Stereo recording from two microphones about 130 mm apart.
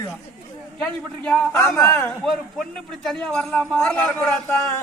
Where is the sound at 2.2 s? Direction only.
Centre (ahead or behind).